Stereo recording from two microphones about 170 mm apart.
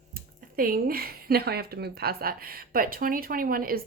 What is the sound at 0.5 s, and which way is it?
A woman's voice, 55° right (ahead or behind).